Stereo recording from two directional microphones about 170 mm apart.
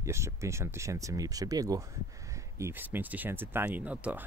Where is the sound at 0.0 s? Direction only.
15° right (ahead or behind).